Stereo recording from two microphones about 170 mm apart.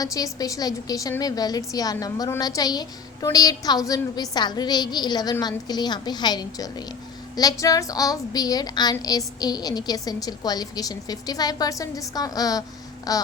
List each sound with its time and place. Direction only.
0.0 s a woman's voice: 20° left (ahead or behind)